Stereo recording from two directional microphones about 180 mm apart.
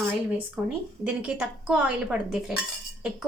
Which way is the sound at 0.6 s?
5° right (ahead or behind).